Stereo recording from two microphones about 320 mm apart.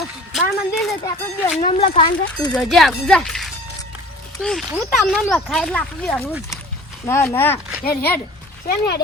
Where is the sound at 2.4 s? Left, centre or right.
Centre.